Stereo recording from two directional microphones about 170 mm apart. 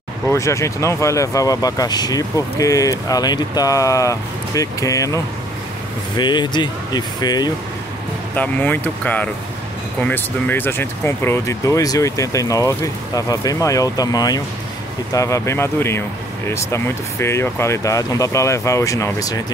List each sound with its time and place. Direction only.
0.3 s speech: 15° left (ahead or behind)
8.4 s speech: 10° left (ahead or behind)